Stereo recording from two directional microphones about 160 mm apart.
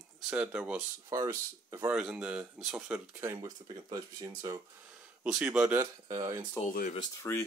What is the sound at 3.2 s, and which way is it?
Speech, 20° right (ahead or behind).